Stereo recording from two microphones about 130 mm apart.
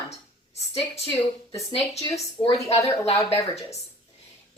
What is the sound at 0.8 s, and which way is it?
Speech, 50° left (ahead or behind).